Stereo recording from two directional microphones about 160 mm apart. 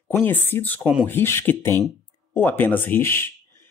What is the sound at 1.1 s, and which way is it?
Speech, 15° left (ahead or behind).